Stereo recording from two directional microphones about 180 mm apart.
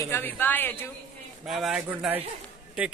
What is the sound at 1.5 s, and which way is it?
Speech, centre (ahead or behind).